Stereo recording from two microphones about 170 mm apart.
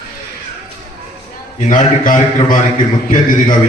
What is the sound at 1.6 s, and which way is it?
A man's voice, 50° left (ahead or behind).